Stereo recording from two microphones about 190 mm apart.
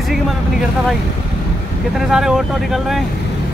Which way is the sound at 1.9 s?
Centre (ahead or behind).